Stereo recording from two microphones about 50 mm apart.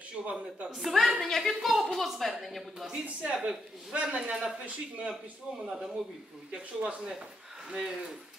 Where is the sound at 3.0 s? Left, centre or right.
Right; by 7.7 s centre.